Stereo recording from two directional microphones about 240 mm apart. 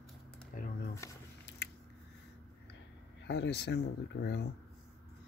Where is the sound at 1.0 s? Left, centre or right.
Centre.